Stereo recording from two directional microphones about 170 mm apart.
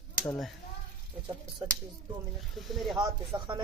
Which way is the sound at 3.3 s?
25° right (ahead or behind).